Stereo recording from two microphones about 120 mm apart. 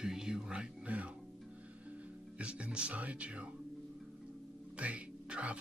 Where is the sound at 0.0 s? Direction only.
5° right (ahead or behind).